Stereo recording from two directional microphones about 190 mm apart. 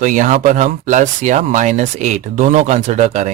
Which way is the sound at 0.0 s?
40° right (ahead or behind).